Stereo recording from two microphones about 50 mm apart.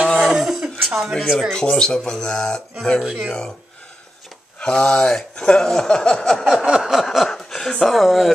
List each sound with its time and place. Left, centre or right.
0.0 s a sound: centre
0.3 s a sound: centre
1.5 s speech: centre
3.0 s speech: centre
3.3 s speech: centre
4.6 s speech: centre
6.8 s speech: centre
7.2 s chuckle: centre
7.8 s speech: centre